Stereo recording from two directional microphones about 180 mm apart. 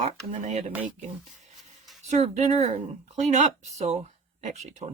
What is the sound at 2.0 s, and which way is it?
Speech, 40° right (ahead or behind).